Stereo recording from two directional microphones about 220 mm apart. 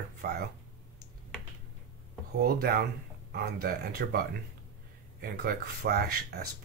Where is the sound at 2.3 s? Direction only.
45° right (ahead or behind).